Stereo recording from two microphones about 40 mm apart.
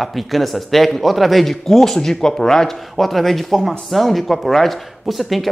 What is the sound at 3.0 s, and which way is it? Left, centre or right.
Speech, centre.